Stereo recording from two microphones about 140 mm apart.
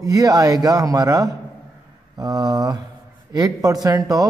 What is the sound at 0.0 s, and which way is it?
Mantra, 25° right (ahead or behind).